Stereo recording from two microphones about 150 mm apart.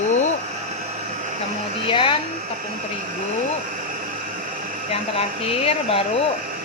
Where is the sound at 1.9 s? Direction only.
35° left (ahead or behind).